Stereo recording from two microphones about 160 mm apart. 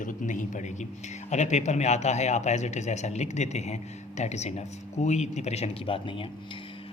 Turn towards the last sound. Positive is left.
turn(degrees=35)  # may be behind; listen again after turning